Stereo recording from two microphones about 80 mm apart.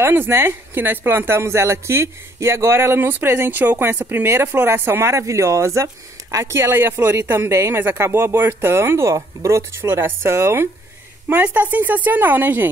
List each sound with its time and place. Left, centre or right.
0.0 s speech: right